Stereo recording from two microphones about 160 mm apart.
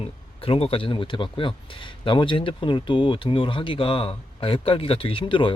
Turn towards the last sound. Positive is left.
turn(degrees=30)  # may be behind; listen again after turning